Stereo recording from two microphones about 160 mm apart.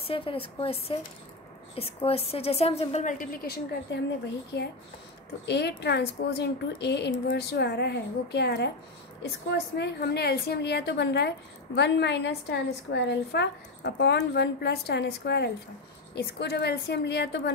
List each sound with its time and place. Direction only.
0.0 s a woman's voice: 35° left (ahead or behind); by 3.3 s 50° left (ahead or behind)
3.4 s a woman's voice: 80° left